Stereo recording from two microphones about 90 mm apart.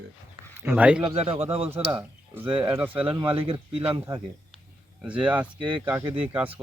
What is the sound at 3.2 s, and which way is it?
Speech, 90° right.